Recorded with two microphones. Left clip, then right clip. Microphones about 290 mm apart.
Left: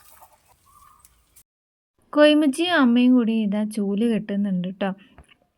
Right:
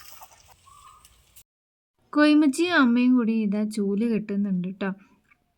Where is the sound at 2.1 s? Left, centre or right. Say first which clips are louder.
Left 4 dB; centre.